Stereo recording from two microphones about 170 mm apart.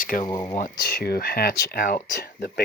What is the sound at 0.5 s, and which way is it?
Speech, 55° left (ahead or behind).